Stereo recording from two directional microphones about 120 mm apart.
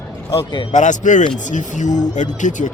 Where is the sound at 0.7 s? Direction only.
90° left.